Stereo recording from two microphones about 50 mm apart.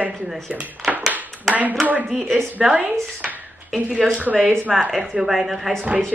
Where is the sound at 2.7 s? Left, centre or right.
Right.